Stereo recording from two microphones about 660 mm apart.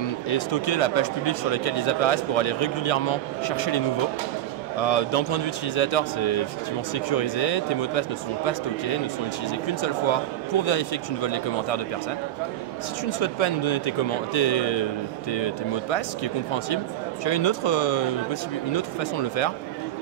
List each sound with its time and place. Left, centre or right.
0.0 s speech: left
9.7 s speech: left
13.0 s speech: left